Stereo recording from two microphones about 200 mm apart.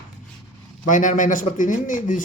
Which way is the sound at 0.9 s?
40° left (ahead or behind).